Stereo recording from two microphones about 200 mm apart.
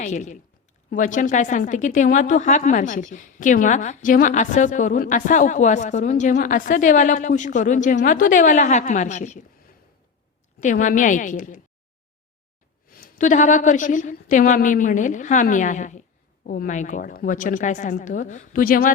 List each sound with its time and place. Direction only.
0.0 s a woman's voice: 35° left (ahead or behind)
10.6 s a woman's voice: 40° left (ahead or behind)
12.9 s a woman's voice: 45° left (ahead or behind)